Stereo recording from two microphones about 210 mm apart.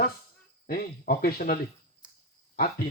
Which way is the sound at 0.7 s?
45° left (ahead or behind).